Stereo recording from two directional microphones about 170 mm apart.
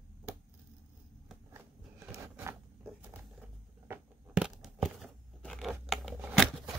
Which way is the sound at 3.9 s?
5° right (ahead or behind).